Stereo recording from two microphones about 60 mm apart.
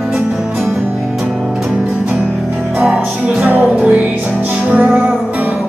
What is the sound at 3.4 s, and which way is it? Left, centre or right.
Music, right.